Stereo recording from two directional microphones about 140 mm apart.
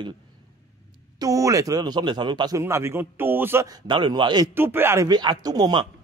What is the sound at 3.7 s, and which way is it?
Speech, 35° right (ahead or behind).